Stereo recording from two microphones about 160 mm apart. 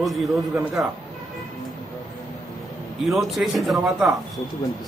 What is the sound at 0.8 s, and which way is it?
Speech, 20° right (ahead or behind).